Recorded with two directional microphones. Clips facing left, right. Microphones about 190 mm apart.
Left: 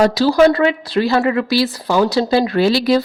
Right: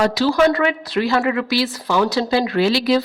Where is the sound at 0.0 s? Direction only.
35° left (ahead or behind).